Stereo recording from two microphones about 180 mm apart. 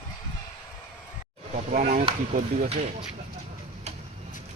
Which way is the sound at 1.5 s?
40° right (ahead or behind).